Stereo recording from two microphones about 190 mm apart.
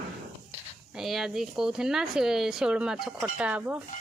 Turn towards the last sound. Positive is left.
turn(degrees=-10)  # may be behind; listen again after turning